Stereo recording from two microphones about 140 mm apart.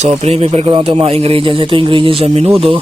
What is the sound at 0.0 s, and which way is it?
A man's voice, 50° right (ahead or behind).